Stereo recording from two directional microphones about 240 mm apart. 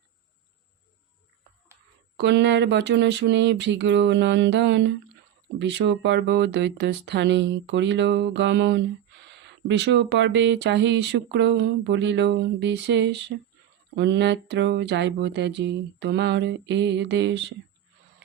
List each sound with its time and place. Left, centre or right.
2.1 s speech: right